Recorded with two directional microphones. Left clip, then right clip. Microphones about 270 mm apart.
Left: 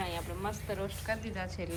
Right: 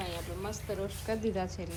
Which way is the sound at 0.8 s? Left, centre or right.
Right.